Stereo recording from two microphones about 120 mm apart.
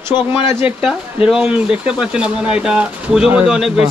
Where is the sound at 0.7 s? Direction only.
10° right (ahead or behind).